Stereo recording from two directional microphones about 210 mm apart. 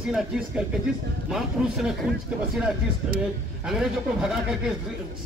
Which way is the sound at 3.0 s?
5° right (ahead or behind).